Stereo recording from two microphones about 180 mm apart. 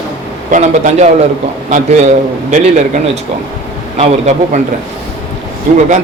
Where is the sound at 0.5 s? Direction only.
40° right (ahead or behind).